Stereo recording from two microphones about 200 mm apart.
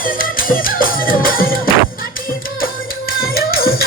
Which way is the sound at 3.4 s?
50° left (ahead or behind).